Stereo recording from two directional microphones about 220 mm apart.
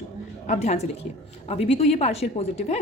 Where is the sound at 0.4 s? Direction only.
30° left (ahead or behind).